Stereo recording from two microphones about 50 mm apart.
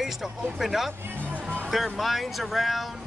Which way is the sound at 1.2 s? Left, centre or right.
Right.